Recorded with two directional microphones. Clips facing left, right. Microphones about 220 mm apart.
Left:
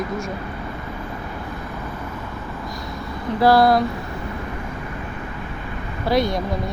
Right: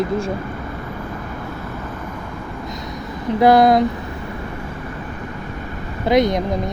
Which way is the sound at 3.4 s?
20° right (ahead or behind).